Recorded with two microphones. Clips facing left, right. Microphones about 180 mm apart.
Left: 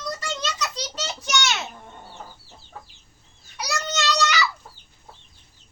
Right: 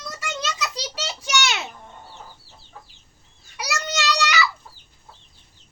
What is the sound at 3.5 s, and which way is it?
Child singing, 10° right (ahead or behind).